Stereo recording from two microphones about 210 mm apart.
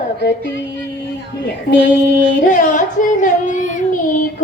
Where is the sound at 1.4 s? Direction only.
55° left (ahead or behind).